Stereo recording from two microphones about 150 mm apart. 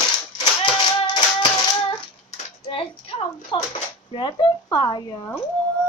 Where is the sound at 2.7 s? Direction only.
35° left (ahead or behind).